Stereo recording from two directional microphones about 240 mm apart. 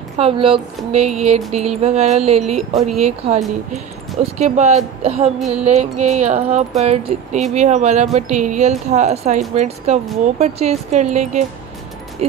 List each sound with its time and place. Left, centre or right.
0.2 s speech: right